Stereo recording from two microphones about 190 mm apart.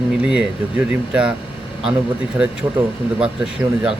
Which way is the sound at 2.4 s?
5° right (ahead or behind).